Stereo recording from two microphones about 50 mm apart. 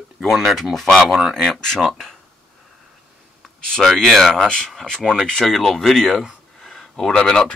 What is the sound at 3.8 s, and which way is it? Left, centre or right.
Speech, centre.